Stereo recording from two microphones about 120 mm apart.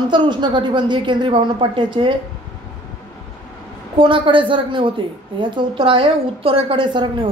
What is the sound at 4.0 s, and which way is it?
A woman's voice, 45° right (ahead or behind).